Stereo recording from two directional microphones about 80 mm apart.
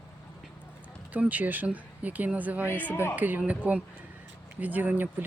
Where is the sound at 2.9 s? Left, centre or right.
Left.